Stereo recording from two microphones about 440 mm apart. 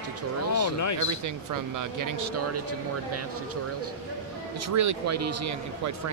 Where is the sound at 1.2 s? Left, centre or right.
Right.